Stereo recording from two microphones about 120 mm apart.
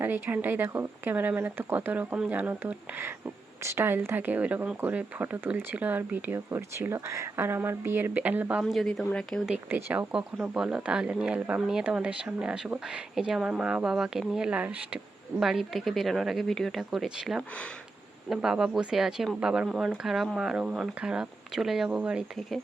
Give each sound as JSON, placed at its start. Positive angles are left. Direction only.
{"t": 0.0, "sound": "speech", "side_deg": -15}
{"t": 8.6, "sound": "speech", "side_deg": 5}
{"t": 9.5, "sound": "speech", "side_deg": -15}
{"t": 15.4, "sound": "speech", "side_deg": 0}
{"t": 22.4, "sound": "speech", "side_deg": 5}